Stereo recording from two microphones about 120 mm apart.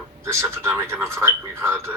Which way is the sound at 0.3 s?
20° right (ahead or behind).